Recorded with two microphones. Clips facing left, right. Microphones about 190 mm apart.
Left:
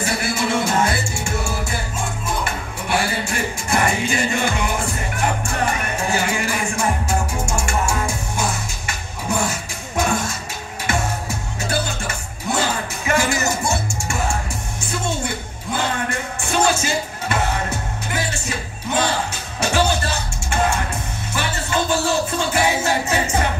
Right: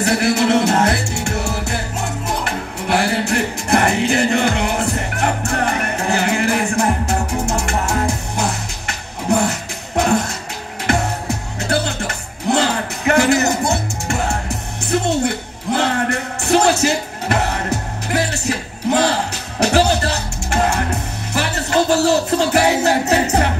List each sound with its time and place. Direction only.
0.0 s music: 65° right (ahead or behind)